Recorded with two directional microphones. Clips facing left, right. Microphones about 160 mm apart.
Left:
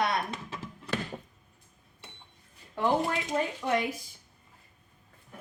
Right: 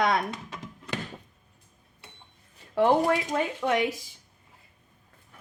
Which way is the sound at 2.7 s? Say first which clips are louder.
Right 6 dB; 75° right (ahead or behind).